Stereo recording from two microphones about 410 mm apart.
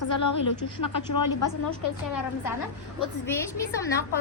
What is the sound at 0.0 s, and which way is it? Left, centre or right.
A woman's voice, left.